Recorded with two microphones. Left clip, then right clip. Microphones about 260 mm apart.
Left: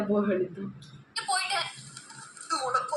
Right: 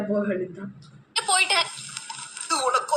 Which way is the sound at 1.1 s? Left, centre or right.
Right.